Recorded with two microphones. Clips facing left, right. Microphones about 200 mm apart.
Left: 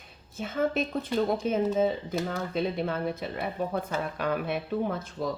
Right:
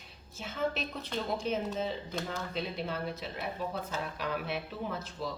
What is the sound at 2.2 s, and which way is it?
Speech, 50° left (ahead or behind).